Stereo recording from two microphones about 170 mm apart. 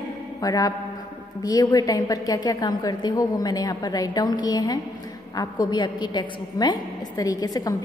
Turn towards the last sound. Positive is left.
turn(degrees=20)  # may be behind; listen again after turning